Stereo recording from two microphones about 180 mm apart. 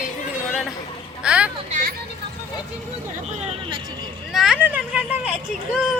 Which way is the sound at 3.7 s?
25° right (ahead or behind).